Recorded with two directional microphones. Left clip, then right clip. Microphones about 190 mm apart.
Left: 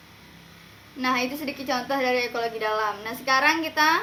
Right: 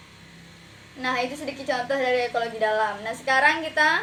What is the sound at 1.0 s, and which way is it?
A woman's voice, 10° left (ahead or behind).